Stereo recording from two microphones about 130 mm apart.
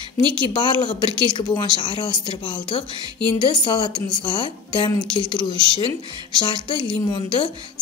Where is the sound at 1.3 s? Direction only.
35° left (ahead or behind).